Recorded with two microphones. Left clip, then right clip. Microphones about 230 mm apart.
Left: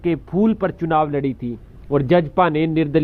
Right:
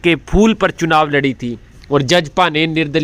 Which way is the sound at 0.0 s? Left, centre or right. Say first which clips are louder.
Right 7 dB; centre.